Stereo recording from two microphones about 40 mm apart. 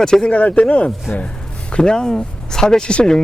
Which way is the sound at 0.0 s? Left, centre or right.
Centre.